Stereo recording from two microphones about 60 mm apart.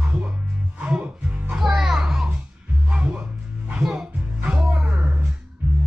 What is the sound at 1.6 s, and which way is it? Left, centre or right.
Music, centre.